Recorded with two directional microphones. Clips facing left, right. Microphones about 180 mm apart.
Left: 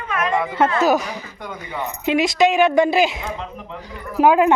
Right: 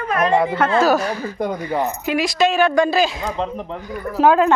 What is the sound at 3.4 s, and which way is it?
Speech, 35° right (ahead or behind).